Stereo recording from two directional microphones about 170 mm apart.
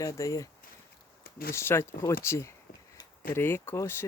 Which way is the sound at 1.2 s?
60° left (ahead or behind).